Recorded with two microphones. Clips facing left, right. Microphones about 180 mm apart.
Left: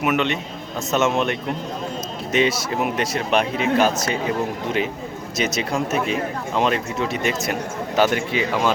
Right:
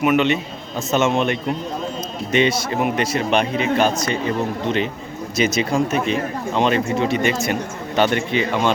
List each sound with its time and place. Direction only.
0.0 s speech: centre (ahead or behind)